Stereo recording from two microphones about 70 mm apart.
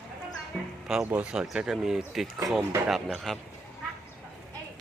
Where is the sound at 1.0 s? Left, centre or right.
Right.